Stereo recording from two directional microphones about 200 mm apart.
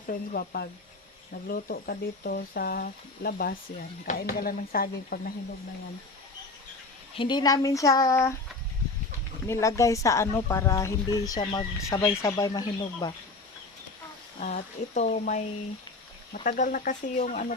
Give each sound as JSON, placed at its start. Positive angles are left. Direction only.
{"t": 0.1, "sound": "speech", "side_deg": 50}
{"t": 7.2, "sound": "speech", "side_deg": 20}
{"t": 9.5, "sound": "speech", "side_deg": 15}
{"t": 14.3, "sound": "speech", "side_deg": 35}